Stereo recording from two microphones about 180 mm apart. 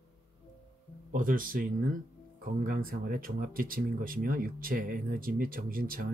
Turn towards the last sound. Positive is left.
turn(degrees=-50)  # may be behind; listen again after turning